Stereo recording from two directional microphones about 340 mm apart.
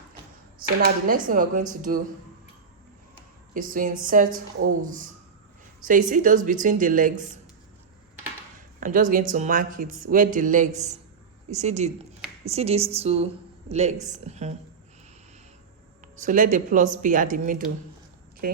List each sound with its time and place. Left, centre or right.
1.0 s a woman's voice: right
3.5 s a woman's voice: right
8.8 s a woman's voice: right
16.1 s a woman's voice: right